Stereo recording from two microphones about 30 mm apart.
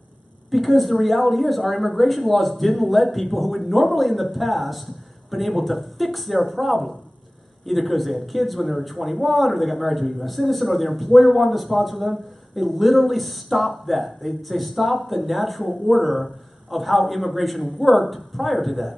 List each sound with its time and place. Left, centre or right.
0.5 s speech: centre